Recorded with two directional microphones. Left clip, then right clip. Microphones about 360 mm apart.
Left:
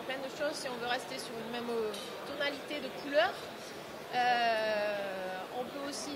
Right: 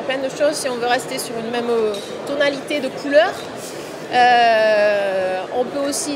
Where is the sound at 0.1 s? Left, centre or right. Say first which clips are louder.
Right 18 dB; left.